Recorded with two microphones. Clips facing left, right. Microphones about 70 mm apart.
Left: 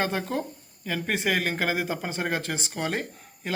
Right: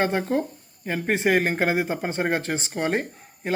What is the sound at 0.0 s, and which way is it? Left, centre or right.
Speech, right.